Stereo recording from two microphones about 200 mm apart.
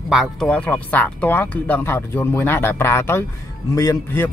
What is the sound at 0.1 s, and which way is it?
A man's voice, centre (ahead or behind).